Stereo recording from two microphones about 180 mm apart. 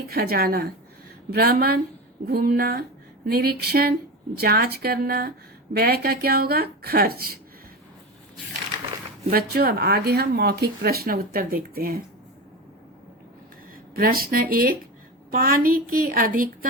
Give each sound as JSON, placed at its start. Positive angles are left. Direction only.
{"t": 0.1, "sound": "speech", "side_deg": -55}
{"t": 9.3, "sound": "speech", "side_deg": -60}
{"t": 13.9, "sound": "a woman's voice", "side_deg": -55}